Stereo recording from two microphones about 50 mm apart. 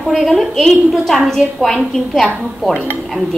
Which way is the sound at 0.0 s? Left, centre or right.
Centre.